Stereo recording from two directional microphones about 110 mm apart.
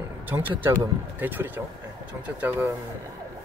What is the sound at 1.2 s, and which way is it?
Speech, 20° right (ahead or behind).